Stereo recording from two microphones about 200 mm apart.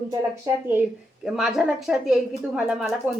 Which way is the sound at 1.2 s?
Centre (ahead or behind).